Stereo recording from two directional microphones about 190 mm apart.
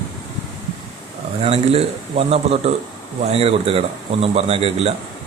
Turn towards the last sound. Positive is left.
turn(degrees=-30)  # may be behind; listen again after turning